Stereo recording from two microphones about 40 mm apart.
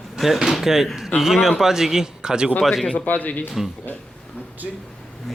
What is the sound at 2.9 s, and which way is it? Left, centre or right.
Speech, left.